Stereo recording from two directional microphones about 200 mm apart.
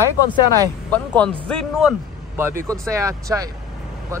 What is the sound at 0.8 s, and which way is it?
Speech, 5° left (ahead or behind).